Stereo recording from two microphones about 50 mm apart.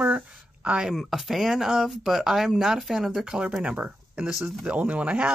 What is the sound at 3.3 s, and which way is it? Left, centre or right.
Speech, right.